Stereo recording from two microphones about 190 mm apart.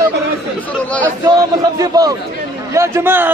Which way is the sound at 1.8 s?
20° right (ahead or behind).